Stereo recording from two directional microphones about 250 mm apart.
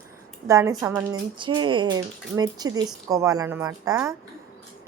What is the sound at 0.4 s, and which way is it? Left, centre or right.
Speech, centre.